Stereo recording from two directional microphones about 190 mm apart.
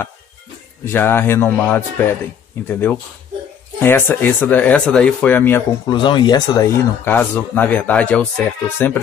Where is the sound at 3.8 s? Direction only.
10° left (ahead or behind).